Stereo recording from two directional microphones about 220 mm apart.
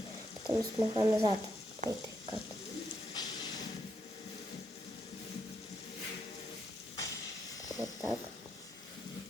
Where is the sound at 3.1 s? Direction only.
20° left (ahead or behind).